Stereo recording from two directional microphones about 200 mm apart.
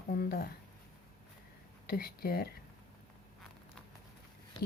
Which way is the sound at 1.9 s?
50° left (ahead or behind).